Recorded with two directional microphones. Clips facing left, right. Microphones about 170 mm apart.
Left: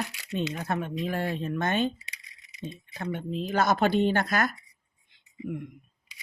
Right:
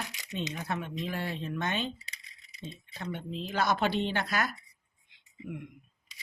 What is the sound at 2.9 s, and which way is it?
Speech, 50° left (ahead or behind).